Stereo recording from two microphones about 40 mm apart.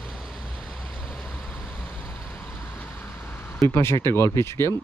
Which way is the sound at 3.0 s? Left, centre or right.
Left.